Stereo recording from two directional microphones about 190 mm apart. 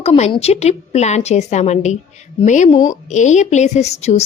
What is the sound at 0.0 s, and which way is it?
A woman's voice, 30° left (ahead or behind).